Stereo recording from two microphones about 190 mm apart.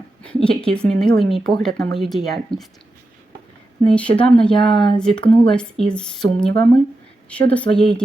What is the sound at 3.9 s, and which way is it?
Speech, 5° left (ahead or behind).